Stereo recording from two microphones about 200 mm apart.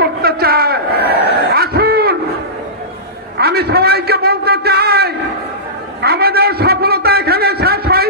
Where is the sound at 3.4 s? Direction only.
50° right (ahead or behind).